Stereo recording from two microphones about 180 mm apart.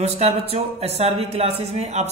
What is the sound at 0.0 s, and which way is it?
A man's voice, 35° right (ahead or behind).